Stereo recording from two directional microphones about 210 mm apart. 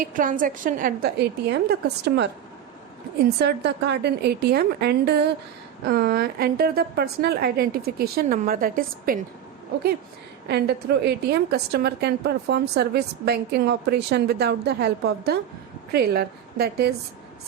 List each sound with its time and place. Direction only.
0.0 s a woman's voice: 40° right (ahead or behind)
10.5 s a woman's voice: 50° right (ahead or behind)